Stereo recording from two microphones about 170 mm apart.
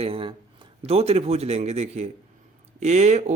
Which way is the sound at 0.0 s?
30° right (ahead or behind).